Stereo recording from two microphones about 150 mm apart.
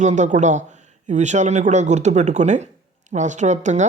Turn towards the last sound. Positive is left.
turn(degrees=-50)  # may be behind; listen again after turning